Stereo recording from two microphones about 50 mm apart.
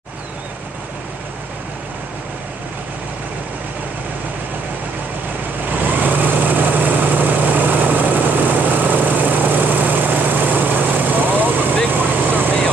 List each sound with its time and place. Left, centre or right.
5.7 s vehicle: right